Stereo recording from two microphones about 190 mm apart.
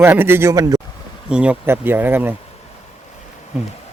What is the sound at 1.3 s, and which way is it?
Speech, 5° right (ahead or behind).